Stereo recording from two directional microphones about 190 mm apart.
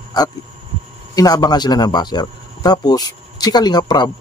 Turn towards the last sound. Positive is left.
turn(degrees=20)  # may be behind; listen again after turning